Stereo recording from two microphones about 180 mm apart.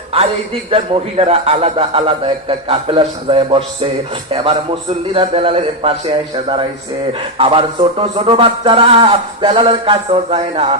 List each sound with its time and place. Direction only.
0.7 s a man's voice: 30° right (ahead or behind)